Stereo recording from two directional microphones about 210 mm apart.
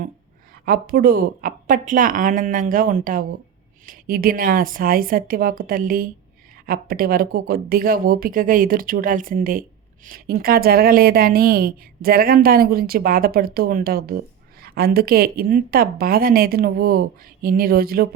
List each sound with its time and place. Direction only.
0.6 s a woman's voice: 45° right (ahead or behind)